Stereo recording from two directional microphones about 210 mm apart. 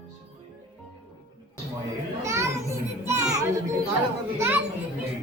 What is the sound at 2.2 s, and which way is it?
A child's voice, 15° right (ahead or behind).